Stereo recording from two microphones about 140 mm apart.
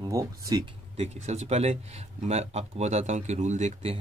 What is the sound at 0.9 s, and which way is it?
Speech, 50° right (ahead or behind).